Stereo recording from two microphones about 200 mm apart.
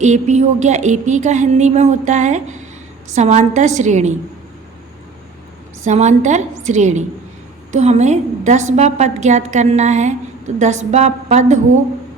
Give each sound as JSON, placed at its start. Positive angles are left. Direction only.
{"t": 0.0, "sound": "a woman's voice", "side_deg": -35}
{"t": 5.8, "sound": "a woman's voice", "side_deg": -35}